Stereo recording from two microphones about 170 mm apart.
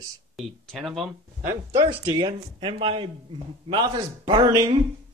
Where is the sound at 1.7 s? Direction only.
25° right (ahead or behind).